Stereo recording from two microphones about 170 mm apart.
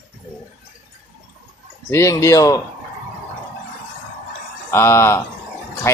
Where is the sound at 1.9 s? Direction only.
15° left (ahead or behind).